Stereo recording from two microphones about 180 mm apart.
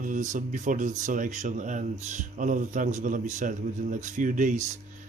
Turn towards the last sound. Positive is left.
turn(degrees=-45)  # may be behind; listen again after turning